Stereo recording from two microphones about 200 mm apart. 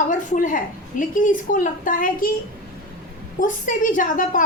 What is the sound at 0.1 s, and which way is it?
A woman's voice, 40° left (ahead or behind).